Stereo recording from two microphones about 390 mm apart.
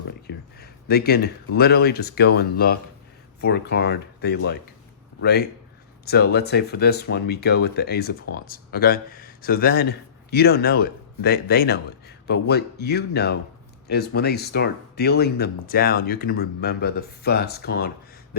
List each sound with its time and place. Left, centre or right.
0.3 s a man's voice: left